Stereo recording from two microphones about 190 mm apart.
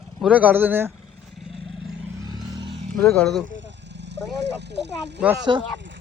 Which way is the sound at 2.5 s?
25° right (ahead or behind).